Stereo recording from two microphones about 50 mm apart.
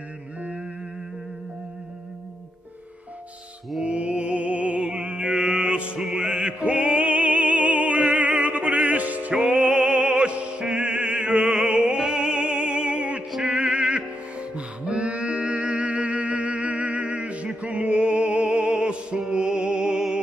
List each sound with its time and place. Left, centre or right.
3.8 s music: right
9.4 s opera: right
13.4 s music: right